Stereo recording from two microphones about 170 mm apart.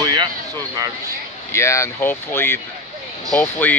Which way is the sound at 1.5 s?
15° left (ahead or behind).